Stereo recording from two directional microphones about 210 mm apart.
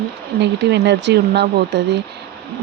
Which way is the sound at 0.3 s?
55° right (ahead or behind).